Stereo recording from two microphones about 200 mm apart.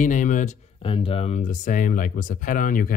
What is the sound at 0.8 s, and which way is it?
Speech, 25° left (ahead or behind).